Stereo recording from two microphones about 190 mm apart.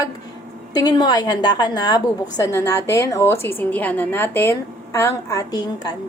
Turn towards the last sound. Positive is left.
turn(degrees=20)  # may be behind; listen again after turning